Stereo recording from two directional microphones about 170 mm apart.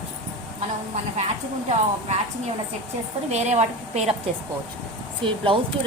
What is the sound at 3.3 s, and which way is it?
Speech, 40° right (ahead or behind).